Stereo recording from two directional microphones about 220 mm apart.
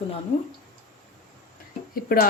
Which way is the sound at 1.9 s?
40° left (ahead or behind).